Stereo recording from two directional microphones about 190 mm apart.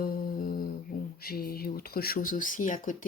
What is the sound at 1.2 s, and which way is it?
Speech, 50° left (ahead or behind).